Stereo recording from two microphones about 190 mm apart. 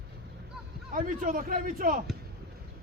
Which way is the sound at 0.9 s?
45° right (ahead or behind).